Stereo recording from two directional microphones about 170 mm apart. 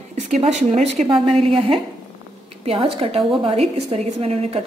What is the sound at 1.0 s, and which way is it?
Speech, 30° right (ahead or behind).